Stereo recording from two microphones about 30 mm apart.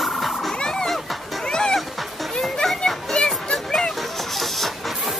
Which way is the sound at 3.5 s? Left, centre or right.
Centre.